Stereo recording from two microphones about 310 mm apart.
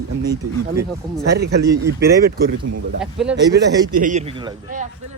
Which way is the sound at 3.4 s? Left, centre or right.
Right.